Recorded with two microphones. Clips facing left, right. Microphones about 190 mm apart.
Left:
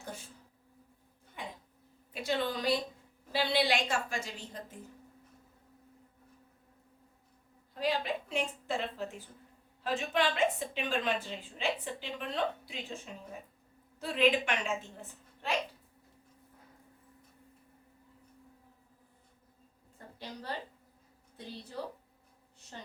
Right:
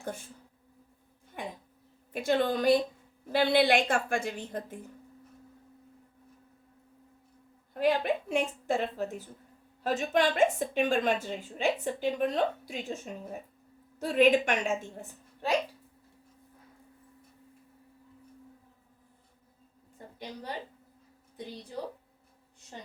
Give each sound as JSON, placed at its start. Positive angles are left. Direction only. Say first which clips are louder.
{"t": 0.0, "sound": "speech", "louder": "right 6 dB", "side_deg": -50}
{"t": 1.4, "sound": "a sound", "louder": "right 5 dB", "side_deg": -55}
{"t": 2.1, "sound": "a woman's voice", "louder": "right 6 dB", "side_deg": -50}
{"t": 7.7, "sound": "a woman's voice", "louder": "right 6 dB", "side_deg": -55}
{"t": 20.1, "sound": "a woman's voice", "louder": "right 1 dB", "side_deg": -15}
{"t": 22.7, "sound": "a woman's voice", "louder": "right 2 dB", "side_deg": -15}